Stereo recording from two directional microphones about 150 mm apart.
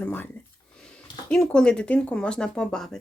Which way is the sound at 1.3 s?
5° left (ahead or behind).